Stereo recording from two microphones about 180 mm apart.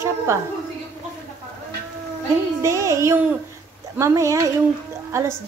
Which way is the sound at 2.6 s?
15° right (ahead or behind).